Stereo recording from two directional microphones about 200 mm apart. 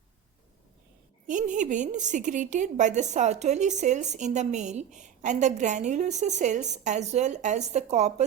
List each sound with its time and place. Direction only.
1.3 s a woman's voice: 40° right (ahead or behind)